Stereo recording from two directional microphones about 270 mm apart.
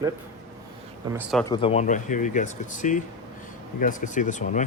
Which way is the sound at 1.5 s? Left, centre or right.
Centre.